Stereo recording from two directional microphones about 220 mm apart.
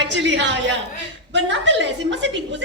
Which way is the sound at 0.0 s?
55° right (ahead or behind).